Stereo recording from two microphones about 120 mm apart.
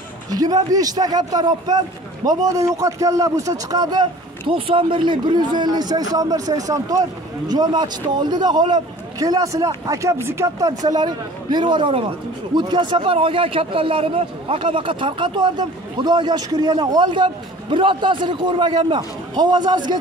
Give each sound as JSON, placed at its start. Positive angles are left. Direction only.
{"t": 0.3, "sound": "a man's voice", "side_deg": -35}